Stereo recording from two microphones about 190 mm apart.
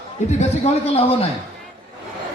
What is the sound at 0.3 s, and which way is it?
A man's voice, 35° left (ahead or behind).